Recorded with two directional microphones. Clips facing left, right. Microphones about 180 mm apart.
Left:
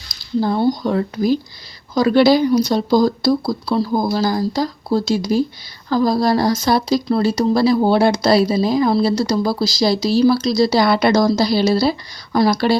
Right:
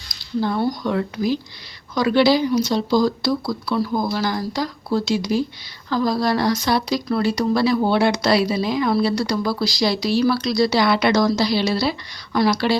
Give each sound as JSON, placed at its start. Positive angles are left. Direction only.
{"t": 0.4, "sound": "speech", "side_deg": 30}
{"t": 3.4, "sound": "speech", "side_deg": 30}
{"t": 4.5, "sound": "speech", "side_deg": 40}
{"t": 12.5, "sound": "speech", "side_deg": 50}